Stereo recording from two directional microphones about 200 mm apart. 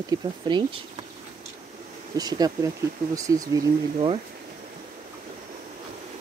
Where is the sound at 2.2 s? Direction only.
20° right (ahead or behind).